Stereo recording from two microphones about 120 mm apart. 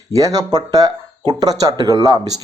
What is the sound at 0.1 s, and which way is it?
A man's voice, 30° right (ahead or behind).